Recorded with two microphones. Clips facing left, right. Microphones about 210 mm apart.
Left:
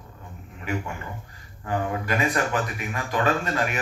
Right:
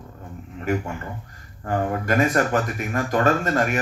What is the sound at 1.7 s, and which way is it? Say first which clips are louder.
A man's voice: right 4 dB; 45° right (ahead or behind).